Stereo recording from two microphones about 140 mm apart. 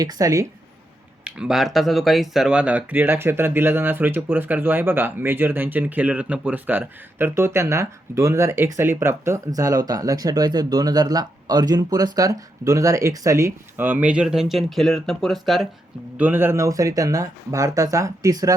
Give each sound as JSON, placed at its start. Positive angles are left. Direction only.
{"t": 0.0, "sound": "speech", "side_deg": -25}
{"t": 1.2, "sound": "speech", "side_deg": -5}
{"t": 16.1, "sound": "speech", "side_deg": -15}